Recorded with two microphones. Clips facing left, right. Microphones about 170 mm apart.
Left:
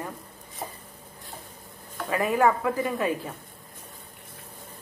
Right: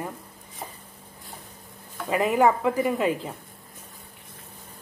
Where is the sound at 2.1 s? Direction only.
20° right (ahead or behind).